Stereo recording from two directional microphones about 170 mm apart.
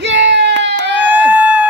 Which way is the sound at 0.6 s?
90° right.